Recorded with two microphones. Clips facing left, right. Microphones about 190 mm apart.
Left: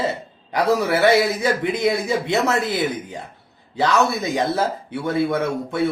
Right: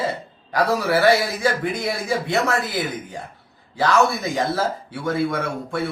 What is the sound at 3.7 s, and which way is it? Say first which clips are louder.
Speech: even; 20° left (ahead or behind).